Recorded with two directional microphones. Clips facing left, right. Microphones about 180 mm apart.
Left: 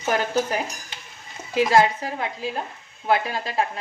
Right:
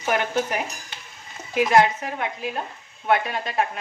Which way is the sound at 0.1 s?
35° left (ahead or behind).